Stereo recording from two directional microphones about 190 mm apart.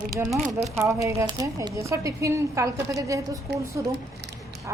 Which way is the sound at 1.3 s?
20° right (ahead or behind).